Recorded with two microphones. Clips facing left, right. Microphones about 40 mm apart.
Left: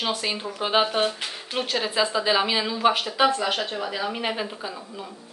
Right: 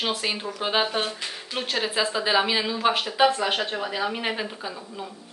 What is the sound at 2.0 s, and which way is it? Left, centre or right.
Speech, centre.